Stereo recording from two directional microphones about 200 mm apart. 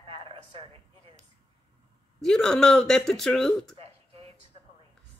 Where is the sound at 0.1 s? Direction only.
30° right (ahead or behind).